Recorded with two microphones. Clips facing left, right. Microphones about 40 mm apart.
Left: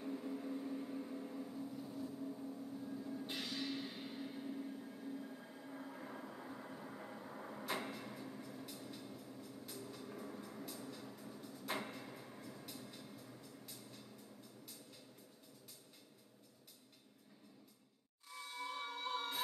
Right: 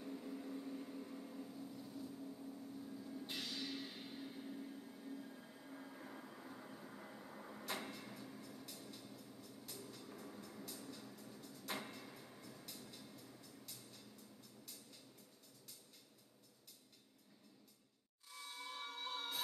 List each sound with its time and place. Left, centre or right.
0.0 s a sound: centre
3.3 s music: centre
9.7 s vehicle: centre
18.3 s music: centre